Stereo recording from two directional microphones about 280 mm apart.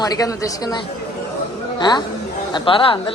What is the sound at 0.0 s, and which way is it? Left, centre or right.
Speech, centre.